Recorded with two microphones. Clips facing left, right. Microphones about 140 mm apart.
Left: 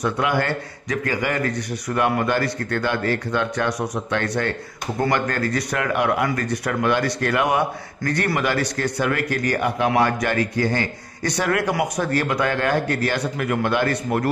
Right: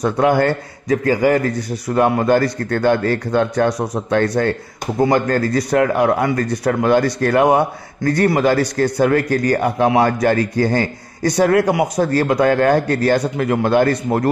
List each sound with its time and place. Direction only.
0.0 s a man's voice: 40° right (ahead or behind)
2.2 s speech: 45° right (ahead or behind); by 10.0 s 25° right (ahead or behind)
10.0 s a man's voice: 40° right (ahead or behind)